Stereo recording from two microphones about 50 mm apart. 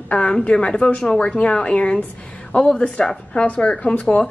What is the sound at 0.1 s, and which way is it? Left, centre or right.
A woman's voice, left.